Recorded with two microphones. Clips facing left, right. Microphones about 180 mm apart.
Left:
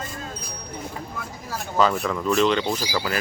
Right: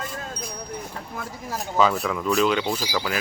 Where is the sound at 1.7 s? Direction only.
Centre (ahead or behind).